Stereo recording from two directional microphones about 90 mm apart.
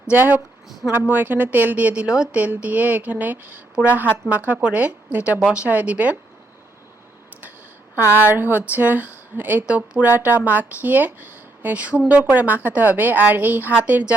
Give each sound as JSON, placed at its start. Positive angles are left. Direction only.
{"t": 0.1, "sound": "a woman's voice", "side_deg": -20}
{"t": 7.9, "sound": "a woman's voice", "side_deg": -20}